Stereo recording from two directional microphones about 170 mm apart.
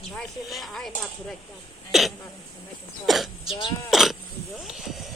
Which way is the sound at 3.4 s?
30° left (ahead or behind).